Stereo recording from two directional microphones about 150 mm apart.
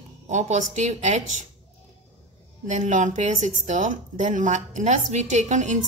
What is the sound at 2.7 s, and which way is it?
A woman's voice, 55° right (ahead or behind).